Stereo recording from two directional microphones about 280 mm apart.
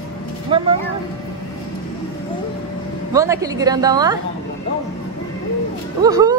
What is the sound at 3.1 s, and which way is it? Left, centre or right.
A woman's voice, centre.